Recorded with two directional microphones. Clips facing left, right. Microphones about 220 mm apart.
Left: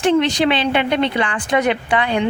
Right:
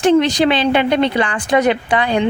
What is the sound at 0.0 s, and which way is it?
Speech, 40° right (ahead or behind).